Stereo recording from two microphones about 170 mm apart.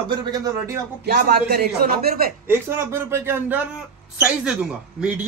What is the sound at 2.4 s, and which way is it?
Speech, 15° right (ahead or behind).